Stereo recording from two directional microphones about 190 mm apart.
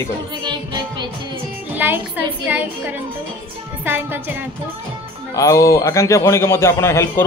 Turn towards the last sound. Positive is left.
turn(degrees=15)  # may be behind; listen again after turning